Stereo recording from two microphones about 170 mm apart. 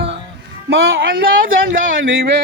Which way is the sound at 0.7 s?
85° right.